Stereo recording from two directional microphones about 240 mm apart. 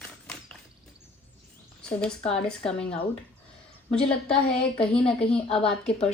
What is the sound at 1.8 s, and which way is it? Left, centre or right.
Speech, centre.